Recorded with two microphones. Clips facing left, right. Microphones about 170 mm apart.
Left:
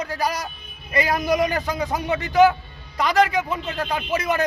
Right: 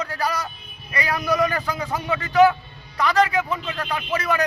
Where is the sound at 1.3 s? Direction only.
20° left (ahead or behind).